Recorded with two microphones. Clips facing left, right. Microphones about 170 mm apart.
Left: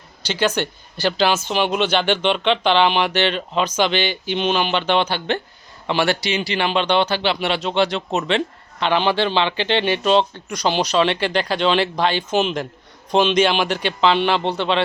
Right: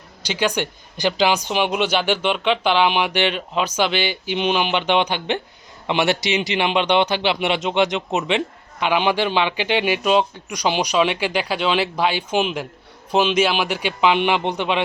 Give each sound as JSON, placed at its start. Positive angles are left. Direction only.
{"t": 0.2, "sound": "speech", "side_deg": -10}